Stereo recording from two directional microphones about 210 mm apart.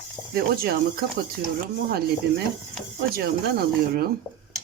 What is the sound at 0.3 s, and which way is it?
Speech, 45° right (ahead or behind).